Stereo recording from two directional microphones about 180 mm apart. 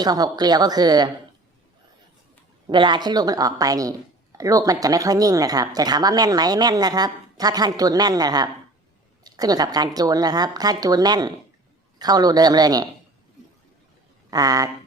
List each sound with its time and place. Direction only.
0.0 s a woman's voice: 20° right (ahead or behind)
2.6 s a woman's voice: 25° right (ahead or behind)
14.3 s speech: 20° right (ahead or behind)